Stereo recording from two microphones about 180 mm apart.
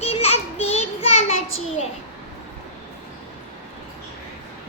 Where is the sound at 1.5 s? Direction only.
90° left.